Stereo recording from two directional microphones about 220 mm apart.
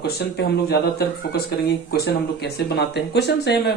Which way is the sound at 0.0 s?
45° left (ahead or behind).